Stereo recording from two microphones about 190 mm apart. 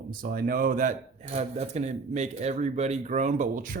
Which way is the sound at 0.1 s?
50° right (ahead or behind).